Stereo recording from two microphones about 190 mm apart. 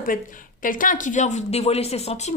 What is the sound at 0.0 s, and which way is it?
A woman's voice, 45° left (ahead or behind).